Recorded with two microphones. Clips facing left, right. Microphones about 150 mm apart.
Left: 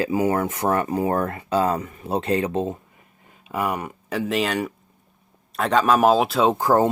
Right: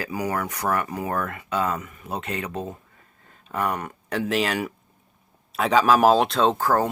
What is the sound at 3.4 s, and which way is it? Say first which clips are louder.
Speech: left 1 dB; 10° left (ahead or behind).